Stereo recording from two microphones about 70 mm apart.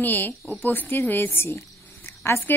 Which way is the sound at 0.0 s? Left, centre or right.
Left.